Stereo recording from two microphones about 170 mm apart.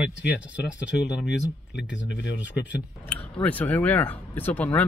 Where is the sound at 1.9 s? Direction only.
90° left.